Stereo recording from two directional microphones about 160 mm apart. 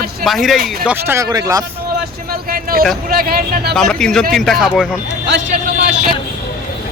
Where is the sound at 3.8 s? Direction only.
5° left (ahead or behind).